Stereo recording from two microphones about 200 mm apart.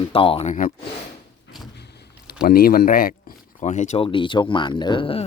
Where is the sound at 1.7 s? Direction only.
55° left (ahead or behind).